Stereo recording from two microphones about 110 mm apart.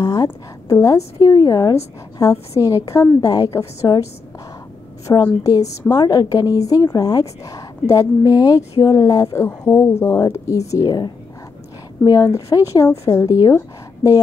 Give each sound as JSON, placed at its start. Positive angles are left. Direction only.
{"t": 0.0, "sound": "a woman's voice", "side_deg": 35}